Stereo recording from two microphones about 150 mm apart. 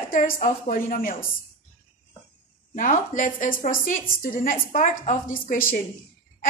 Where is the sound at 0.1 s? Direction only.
60° left (ahead or behind).